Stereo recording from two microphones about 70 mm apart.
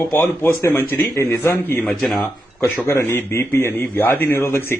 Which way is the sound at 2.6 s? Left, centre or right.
Left.